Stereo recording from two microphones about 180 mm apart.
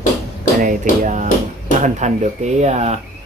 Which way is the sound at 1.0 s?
45° right (ahead or behind).